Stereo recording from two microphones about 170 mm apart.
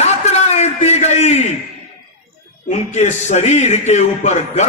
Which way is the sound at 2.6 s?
45° left (ahead or behind).